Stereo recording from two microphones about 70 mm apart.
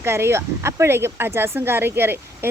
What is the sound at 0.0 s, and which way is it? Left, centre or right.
Speech, right.